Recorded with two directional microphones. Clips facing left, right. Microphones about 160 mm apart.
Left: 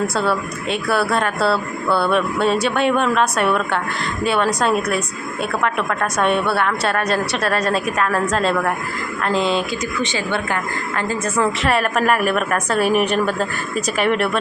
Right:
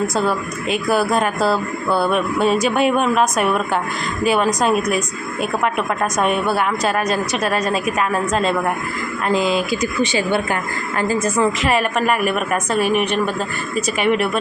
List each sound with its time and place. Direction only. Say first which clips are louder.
0.9 s a woman's voice: right 2 dB; 15° right (ahead or behind)
9.8 s speech: right 4 dB; 20° left (ahead or behind)
10.2 s a woman's voice: right 2 dB; 10° right (ahead or behind)